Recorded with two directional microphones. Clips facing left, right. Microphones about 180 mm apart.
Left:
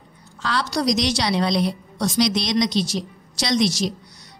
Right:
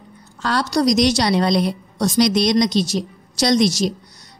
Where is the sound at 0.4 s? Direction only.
45° right (ahead or behind).